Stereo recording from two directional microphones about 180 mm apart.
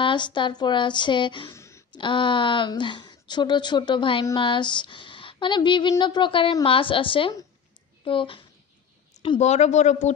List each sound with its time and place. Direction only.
0.0 s speech: 25° left (ahead or behind)
1.6 s a sound: 15° left (ahead or behind)
2.0 s speech: 25° left (ahead or behind)